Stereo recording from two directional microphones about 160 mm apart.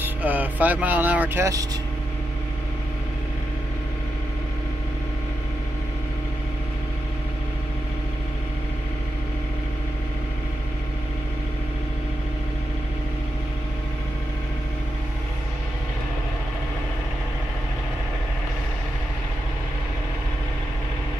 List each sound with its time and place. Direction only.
0.0 s speech: 10° right (ahead or behind)